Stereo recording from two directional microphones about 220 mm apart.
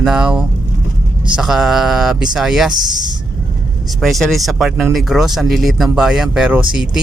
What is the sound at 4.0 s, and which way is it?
Speech, centre (ahead or behind).